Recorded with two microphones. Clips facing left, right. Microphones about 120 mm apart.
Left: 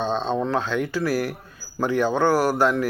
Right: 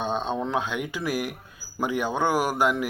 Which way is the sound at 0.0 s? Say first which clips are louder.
Left 3 dB; 10° right (ahead or behind).